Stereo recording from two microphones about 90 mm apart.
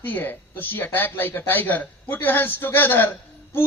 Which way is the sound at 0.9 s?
25° left (ahead or behind).